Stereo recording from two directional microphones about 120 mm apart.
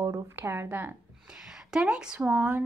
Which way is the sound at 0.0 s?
20° right (ahead or behind).